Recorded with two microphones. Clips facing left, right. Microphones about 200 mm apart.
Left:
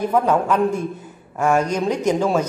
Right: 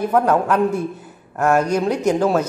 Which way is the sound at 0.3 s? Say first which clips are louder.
Right 1 dB; 10° right (ahead or behind).